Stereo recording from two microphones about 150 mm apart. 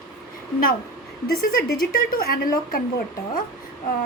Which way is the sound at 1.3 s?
80° left.